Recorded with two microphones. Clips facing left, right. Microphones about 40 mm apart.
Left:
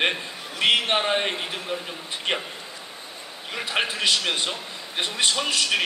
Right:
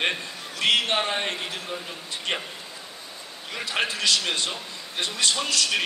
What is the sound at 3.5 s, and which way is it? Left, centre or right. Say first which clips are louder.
A man's voice: left 1 dB; centre.